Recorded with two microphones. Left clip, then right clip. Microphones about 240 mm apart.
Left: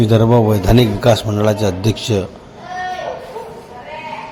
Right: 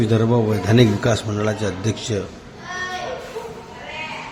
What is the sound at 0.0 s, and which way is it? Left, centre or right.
A man's voice, centre.